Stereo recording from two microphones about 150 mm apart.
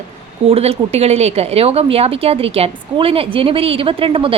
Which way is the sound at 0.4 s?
40° right (ahead or behind).